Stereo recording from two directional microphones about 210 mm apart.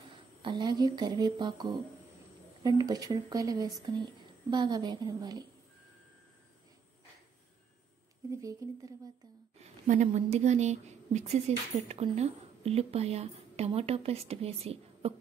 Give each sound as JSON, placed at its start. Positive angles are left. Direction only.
{"t": 0.1, "sound": "speech", "side_deg": -25}
{"t": 8.4, "sound": "speech", "side_deg": -15}
{"t": 9.6, "sound": "speech", "side_deg": -35}